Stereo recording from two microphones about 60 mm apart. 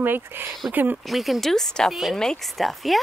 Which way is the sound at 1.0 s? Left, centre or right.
Centre.